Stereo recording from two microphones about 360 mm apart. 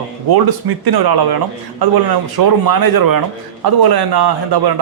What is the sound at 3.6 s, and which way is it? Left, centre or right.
Speech, right.